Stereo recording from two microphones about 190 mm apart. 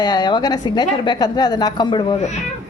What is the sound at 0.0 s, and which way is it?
Speech, 20° left (ahead or behind).